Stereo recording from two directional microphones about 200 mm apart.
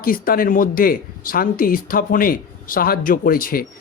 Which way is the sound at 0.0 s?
45° left (ahead or behind).